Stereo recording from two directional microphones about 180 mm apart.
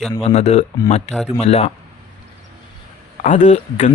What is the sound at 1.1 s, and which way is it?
Speech, 5° left (ahead or behind).